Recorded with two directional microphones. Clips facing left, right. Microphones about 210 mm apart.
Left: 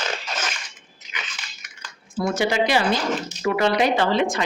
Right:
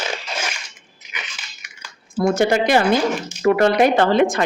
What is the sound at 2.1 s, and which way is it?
A woman's voice, 50° right (ahead or behind).